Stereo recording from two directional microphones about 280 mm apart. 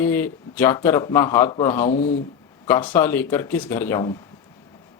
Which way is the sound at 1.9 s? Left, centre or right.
Left.